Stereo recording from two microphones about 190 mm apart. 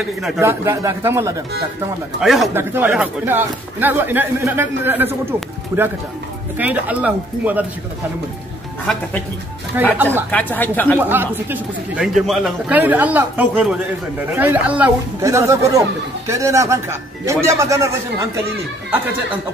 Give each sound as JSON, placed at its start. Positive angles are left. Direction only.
{"t": 0.4, "sound": "speech", "side_deg": -15}
{"t": 2.1, "sound": "speech", "side_deg": 0}
{"t": 9.8, "sound": "speech", "side_deg": -10}
{"t": 10.3, "sound": "speech", "side_deg": 10}
{"t": 11.1, "sound": "speech", "side_deg": -10}